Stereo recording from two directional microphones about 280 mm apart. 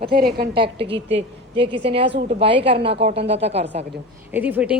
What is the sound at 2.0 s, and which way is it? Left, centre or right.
A woman's voice, right.